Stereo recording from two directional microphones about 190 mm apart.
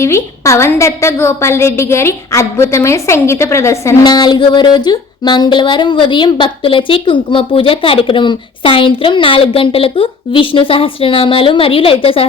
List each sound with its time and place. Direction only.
0.0 s a woman's voice: 15° left (ahead or behind)